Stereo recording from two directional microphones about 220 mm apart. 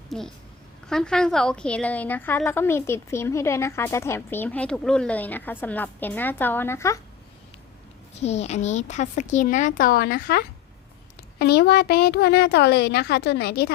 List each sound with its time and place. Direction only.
0.1 s a child's voice: centre (ahead or behind)
8.2 s a woman's voice: 30° left (ahead or behind); by 13.7 s 45° left (ahead or behind)